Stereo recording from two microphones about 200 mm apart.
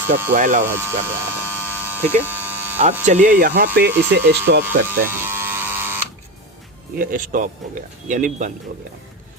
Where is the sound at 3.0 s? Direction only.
40° right (ahead or behind); by 4.6 s 55° right (ahead or behind).